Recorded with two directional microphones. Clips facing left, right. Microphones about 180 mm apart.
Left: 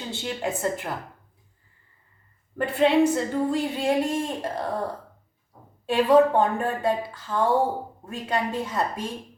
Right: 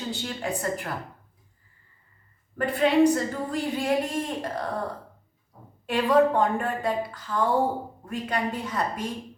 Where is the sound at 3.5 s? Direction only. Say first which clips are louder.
Left 3 dB; 25° left (ahead or behind).